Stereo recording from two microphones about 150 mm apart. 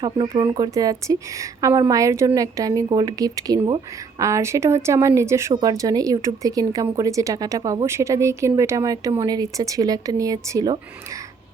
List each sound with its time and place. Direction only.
0.0 s speech: 35° right (ahead or behind)